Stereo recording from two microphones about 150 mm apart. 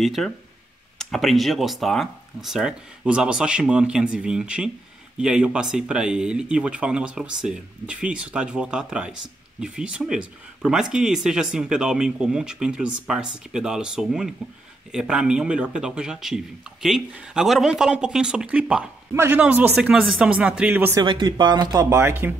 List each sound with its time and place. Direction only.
0.0 s speech: centre (ahead or behind)
21.0 s speech: 30° right (ahead or behind)
21.8 s speech: 15° right (ahead or behind)